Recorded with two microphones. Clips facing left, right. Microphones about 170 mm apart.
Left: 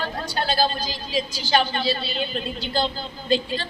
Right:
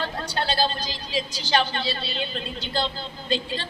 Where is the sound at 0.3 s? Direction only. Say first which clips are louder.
Left 2 dB; 25° right (ahead or behind).